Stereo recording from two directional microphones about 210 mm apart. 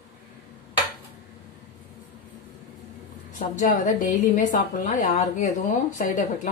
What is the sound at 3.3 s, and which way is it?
A woman's voice, 40° left (ahead or behind).